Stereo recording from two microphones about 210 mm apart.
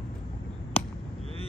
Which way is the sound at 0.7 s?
30° left (ahead or behind).